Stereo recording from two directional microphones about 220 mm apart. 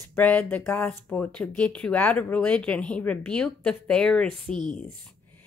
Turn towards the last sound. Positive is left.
turn(degrees=5)  # may be behind; listen again after turning